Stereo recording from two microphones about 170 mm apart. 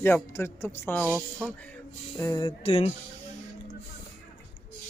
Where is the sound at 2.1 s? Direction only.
20° left (ahead or behind).